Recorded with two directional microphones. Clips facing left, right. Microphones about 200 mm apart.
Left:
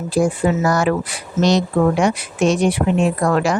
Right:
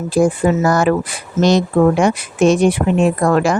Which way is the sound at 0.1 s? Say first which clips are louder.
Right 3 dB; 50° right (ahead or behind).